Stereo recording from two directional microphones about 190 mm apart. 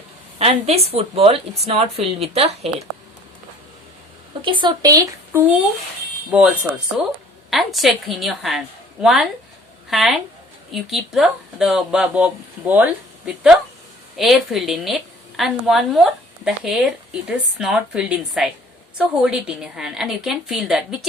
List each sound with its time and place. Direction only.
0.3 s speech: 35° right (ahead or behind)
4.4 s a woman's voice: 25° right (ahead or behind); by 21.1 s centre (ahead or behind)